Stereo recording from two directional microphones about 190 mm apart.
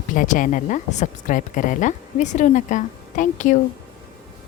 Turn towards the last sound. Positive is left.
turn(degrees=40)  # may be behind; listen again after turning